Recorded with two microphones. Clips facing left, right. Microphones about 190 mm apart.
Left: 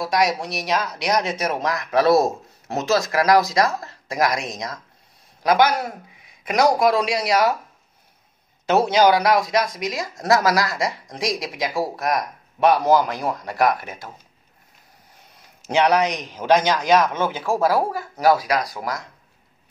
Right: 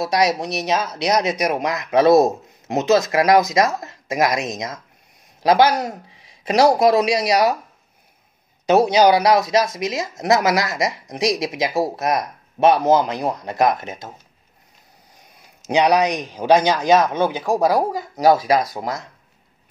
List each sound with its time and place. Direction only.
0.0 s speech: 25° right (ahead or behind)
8.6 s speech: 15° right (ahead or behind)
15.6 s a man's voice: 15° right (ahead or behind)